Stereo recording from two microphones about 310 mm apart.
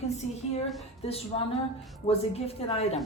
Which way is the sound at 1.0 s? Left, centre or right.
Centre.